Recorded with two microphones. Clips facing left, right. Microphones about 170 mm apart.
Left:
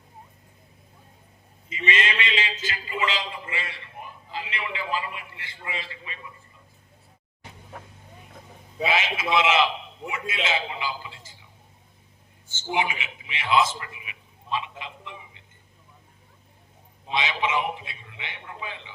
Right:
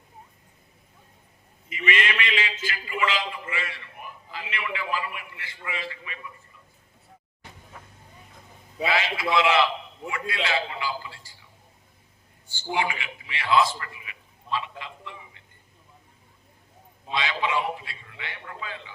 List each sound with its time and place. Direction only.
1.7 s a man's voice: 25° left (ahead or behind)
8.8 s a man's voice: 20° left (ahead or behind)
12.5 s a man's voice: 20° left (ahead or behind)
17.1 s a man's voice: 20° left (ahead or behind)